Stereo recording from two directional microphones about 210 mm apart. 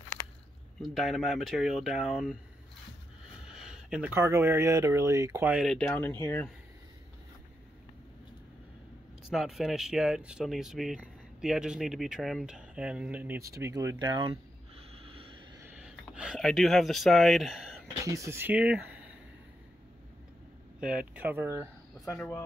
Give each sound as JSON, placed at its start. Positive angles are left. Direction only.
{"t": 0.2, "sound": "biting", "side_deg": 10}
{"t": 0.7, "sound": "speech", "side_deg": 0}
{"t": 3.4, "sound": "speech", "side_deg": 0}
{"t": 9.3, "sound": "speech", "side_deg": 0}
{"t": 15.0, "sound": "vehicle", "side_deg": -25}
{"t": 15.6, "sound": "a sound", "side_deg": -5}
{"t": 18.0, "sound": "speech", "side_deg": -15}
{"t": 21.1, "sound": "speech", "side_deg": -10}
{"t": 22.1, "sound": "speech", "side_deg": 10}